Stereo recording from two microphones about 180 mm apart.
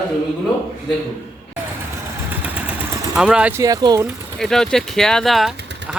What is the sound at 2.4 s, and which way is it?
Vehicle, 10° right (ahead or behind).